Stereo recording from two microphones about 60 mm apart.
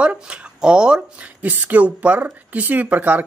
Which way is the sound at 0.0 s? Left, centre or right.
Centre.